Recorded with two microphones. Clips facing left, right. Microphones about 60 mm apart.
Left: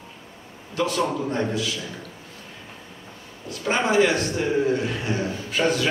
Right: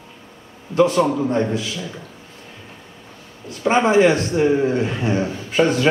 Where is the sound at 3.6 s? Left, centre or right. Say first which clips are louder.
Right 6 dB; right.